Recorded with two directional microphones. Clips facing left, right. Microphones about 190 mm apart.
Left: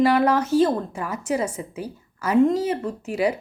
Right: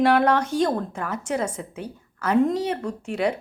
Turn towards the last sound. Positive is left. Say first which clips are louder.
# left 1 dB
turn(degrees=5)  # may be behind; listen again after turning